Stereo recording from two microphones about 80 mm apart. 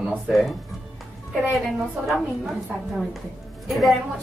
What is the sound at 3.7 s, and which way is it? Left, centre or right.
Speech, centre.